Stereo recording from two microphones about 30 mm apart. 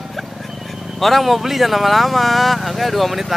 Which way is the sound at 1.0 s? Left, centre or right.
Centre.